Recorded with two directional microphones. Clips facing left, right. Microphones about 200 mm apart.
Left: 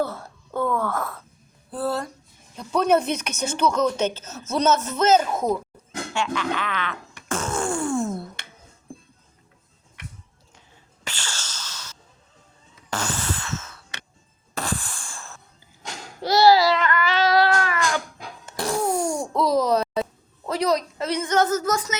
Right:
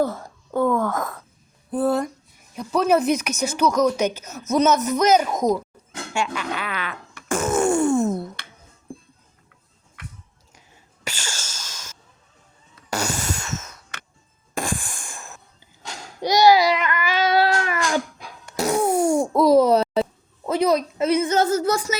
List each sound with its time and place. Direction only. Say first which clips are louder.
0.0 s a woman's voice: right 4 dB; 15° right (ahead or behind)
11.0 s sneeze: right 2 dB; 10° right (ahead or behind)
12.9 s cat: right 2 dB; 10° right (ahead or behind)
13.5 s a sound: right 1 dB; 15° right (ahead or behind)
16.2 s babbling: right 1 dB; 15° right (ahead or behind)
18.7 s laughter: right 5 dB; 25° right (ahead or behind)
20.5 s a woman's voice: right 3 dB; 25° right (ahead or behind)